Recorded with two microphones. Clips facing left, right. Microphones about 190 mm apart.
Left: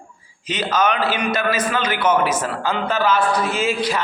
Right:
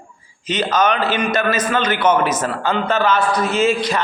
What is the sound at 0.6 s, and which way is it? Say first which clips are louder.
A man's voice: right 1 dB; 5° left (ahead or behind).